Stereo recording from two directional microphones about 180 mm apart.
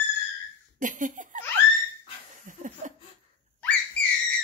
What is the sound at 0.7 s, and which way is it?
Laughter, 45° right (ahead or behind).